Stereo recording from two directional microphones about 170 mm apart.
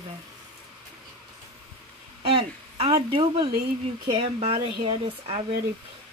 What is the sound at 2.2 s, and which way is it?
Speech, 30° right (ahead or behind).